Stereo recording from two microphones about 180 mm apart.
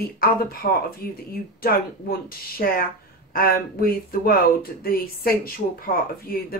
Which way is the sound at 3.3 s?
55° left (ahead or behind).